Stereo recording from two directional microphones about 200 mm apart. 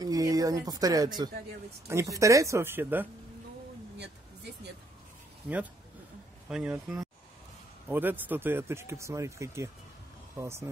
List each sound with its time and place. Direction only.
0.0 s speech: 20° right (ahead or behind)
4.0 s a sound: 55° right (ahead or behind)
6.5 s speech: 5° right (ahead or behind)